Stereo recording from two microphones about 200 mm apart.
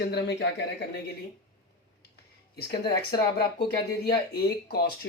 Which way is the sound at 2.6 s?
50° left (ahead or behind).